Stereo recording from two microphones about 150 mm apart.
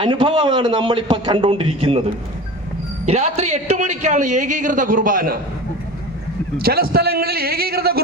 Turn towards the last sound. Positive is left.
turn(degrees=-90)